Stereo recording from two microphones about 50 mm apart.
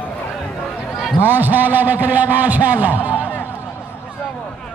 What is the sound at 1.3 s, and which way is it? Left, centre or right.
A man's voice, right.